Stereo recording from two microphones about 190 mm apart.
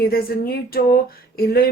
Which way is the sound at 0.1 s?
55° left (ahead or behind).